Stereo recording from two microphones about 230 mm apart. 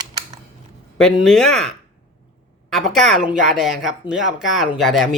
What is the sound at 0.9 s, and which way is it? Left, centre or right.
Speech, centre.